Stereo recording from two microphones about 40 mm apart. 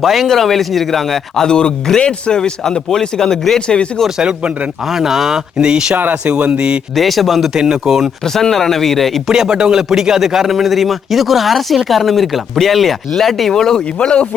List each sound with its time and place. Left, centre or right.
0.0 s speech: centre
1.5 s speech: centre
4.2 s speech: right
4.9 s speech: centre
5.5 s speech: right
6.9 s speech: centre
8.2 s speech: centre
9.2 s speech: centre
9.9 s speech: centre
14.0 s speech: left